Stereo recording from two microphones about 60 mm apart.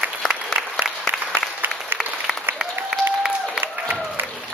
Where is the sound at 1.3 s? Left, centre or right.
Right.